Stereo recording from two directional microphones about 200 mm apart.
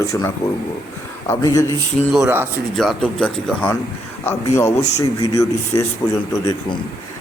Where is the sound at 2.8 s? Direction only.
5° left (ahead or behind).